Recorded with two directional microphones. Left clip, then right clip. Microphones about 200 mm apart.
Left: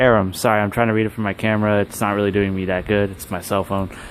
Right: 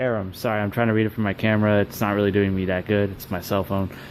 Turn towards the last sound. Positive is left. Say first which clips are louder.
# left 3 dB
turn(degrees=10)  # may be behind; listen again after turning